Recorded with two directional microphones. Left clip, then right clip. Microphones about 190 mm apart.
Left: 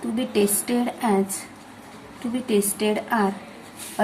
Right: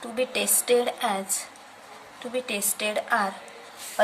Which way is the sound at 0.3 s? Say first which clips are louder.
Even; 25° right (ahead or behind).